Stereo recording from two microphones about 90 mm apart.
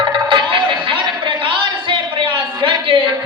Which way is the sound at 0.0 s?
65° right (ahead or behind).